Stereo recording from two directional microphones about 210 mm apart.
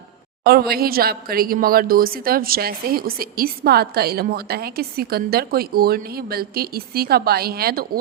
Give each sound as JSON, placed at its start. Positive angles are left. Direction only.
{"t": 0.4, "sound": "a woman's voice", "side_deg": -45}